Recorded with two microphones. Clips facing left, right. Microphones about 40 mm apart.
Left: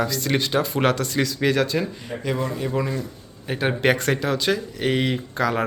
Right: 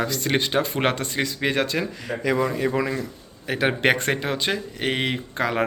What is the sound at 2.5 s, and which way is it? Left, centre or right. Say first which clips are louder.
Speech: right 2 dB; right.